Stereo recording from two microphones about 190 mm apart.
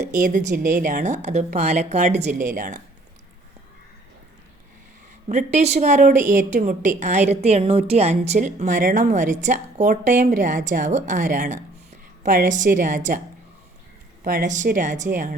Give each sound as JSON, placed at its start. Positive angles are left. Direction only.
{"t": 0.2, "sound": "a woman's voice", "side_deg": -40}
{"t": 5.3, "sound": "a woman's voice", "side_deg": -35}
{"t": 14.3, "sound": "speech", "side_deg": -45}